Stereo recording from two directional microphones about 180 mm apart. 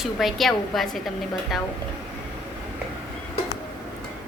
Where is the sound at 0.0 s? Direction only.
Centre (ahead or behind).